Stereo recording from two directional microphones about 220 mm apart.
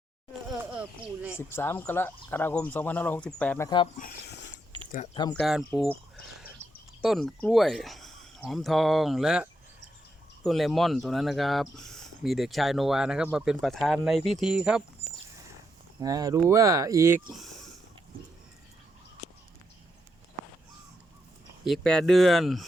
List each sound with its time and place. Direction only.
1.4 s speech: 10° left (ahead or behind)
3.9 s speech: 40° left (ahead or behind)
5.3 s speech: centre (ahead or behind)
7.0 s speech: centre (ahead or behind)
16.0 s speech: 15° right (ahead or behind)
21.6 s speech: centre (ahead or behind)